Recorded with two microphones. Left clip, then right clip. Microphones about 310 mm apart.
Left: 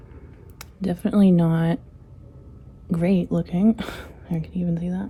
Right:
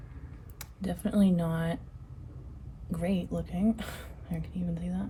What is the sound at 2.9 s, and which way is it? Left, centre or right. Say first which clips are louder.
Speech: left 10 dB; left.